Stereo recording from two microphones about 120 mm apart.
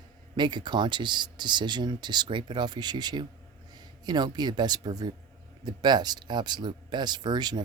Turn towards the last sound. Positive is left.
turn(degrees=-35)  # may be behind; listen again after turning